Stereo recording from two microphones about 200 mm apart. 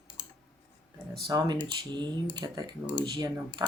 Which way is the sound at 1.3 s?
20° right (ahead or behind).